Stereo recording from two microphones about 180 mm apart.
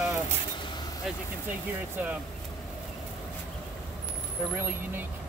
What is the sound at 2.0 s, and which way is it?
Speech, 10° right (ahead or behind).